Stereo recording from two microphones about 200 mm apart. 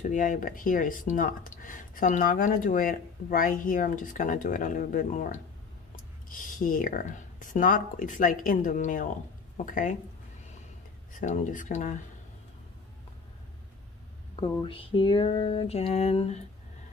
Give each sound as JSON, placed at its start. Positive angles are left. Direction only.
{"t": 0.0, "sound": "speech", "side_deg": 40}
{"t": 11.1, "sound": "speech", "side_deg": 40}
{"t": 14.6, "sound": "a sound", "side_deg": 25}